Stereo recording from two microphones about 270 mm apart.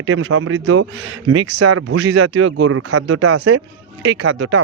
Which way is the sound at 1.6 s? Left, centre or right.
Right.